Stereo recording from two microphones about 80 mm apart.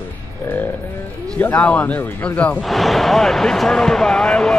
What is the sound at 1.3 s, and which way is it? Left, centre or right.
A man's voice, centre.